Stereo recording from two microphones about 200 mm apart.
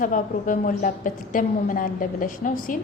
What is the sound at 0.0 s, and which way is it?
A woman's voice, 40° left (ahead or behind).